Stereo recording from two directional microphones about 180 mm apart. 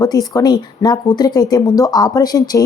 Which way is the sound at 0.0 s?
20° left (ahead or behind).